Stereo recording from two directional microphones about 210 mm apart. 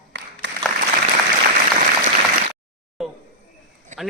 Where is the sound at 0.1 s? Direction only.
60° right (ahead or behind).